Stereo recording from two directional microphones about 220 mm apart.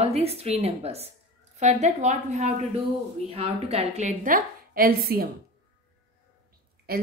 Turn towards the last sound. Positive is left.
turn(degrees=-45)  # may be behind; listen again after turning